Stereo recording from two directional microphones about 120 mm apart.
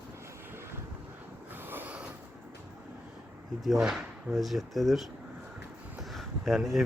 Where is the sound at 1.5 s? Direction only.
15° right (ahead or behind).